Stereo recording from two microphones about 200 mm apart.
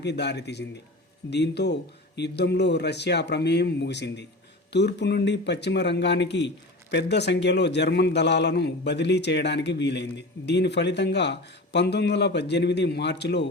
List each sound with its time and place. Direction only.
0.0 s a man's voice: 60° left (ahead or behind)